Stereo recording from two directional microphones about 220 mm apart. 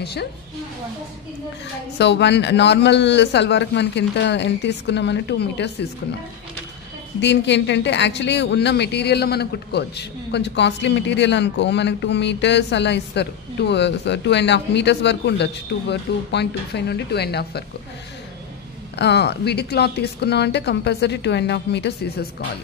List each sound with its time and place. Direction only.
0.0 s speech: 50° left (ahead or behind)
2.0 s speech: 50° left (ahead or behind)
7.2 s speech: 55° left (ahead or behind)
18.9 s speech: 50° left (ahead or behind)